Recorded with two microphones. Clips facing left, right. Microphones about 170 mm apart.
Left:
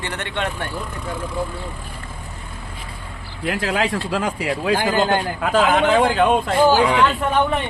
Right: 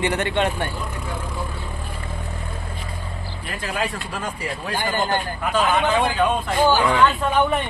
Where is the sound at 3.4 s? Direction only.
85° left.